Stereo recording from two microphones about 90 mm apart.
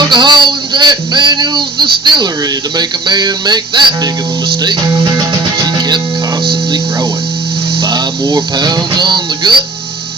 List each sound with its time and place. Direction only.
0.0 s speech: 55° right (ahead or behind)
5.5 s music: 50° right (ahead or behind)
7.8 s insect: 55° right (ahead or behind)
8.5 s speech: 50° right (ahead or behind)